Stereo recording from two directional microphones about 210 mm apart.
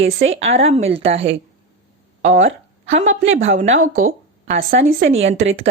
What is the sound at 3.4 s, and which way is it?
Speech, 30° right (ahead or behind).